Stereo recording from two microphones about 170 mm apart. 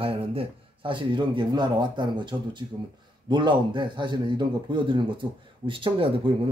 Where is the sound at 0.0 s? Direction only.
30° right (ahead or behind).